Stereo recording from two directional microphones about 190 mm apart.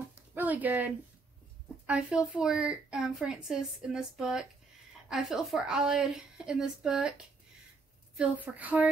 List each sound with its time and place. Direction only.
0.3 s a woman's voice: 10° right (ahead or behind)